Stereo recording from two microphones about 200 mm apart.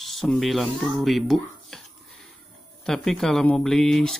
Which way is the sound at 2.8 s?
5° left (ahead or behind).